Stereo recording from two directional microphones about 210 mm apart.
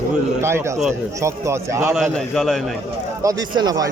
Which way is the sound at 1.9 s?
Centre (ahead or behind).